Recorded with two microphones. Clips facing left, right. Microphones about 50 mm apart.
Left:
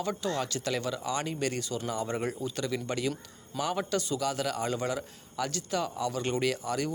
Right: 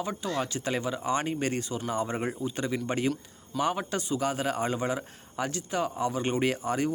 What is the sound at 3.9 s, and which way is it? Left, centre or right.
Speech, right.